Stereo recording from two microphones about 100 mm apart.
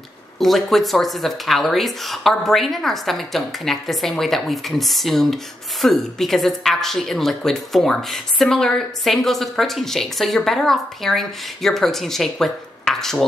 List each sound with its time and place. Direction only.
0.4 s speech: centre (ahead or behind)